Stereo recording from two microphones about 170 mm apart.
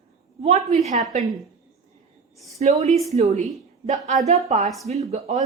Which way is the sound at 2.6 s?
40° right (ahead or behind).